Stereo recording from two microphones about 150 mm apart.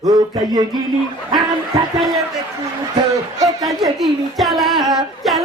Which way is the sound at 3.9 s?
Centre (ahead or behind).